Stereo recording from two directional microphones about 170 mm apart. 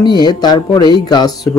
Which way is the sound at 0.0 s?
25° left (ahead or behind).